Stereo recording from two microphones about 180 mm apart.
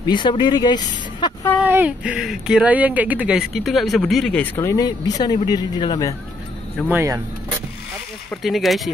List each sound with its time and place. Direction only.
0.0 s speech: 25° left (ahead or behind)
1.6 s speech: 10° right (ahead or behind); by 6.1 s 25° left (ahead or behind)
6.9 s speech: 15° right (ahead or behind)
8.3 s speech: centre (ahead or behind)